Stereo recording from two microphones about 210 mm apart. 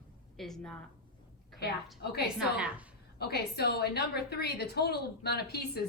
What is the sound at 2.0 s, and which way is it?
Speech, 50° left (ahead or behind).